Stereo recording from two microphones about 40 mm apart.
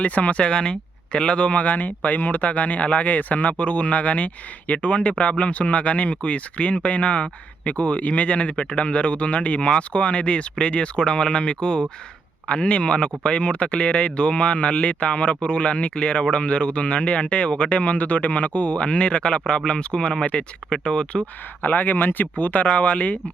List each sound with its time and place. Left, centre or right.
0.0 s speech: left
21.6 s speech: left